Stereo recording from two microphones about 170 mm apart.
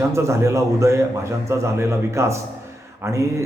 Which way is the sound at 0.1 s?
15° right (ahead or behind).